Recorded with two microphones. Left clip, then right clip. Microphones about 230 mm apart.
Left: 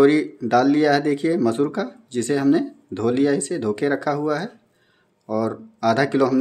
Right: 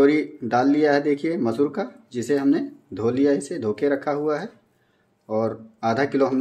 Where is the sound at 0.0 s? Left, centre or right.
Centre.